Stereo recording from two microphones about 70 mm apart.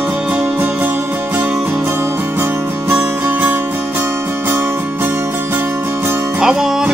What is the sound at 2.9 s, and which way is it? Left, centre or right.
Music, right.